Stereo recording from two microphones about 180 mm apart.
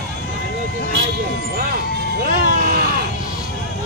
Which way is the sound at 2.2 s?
55° right (ahead or behind).